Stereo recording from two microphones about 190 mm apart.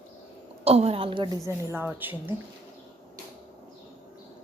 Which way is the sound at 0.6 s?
30° right (ahead or behind).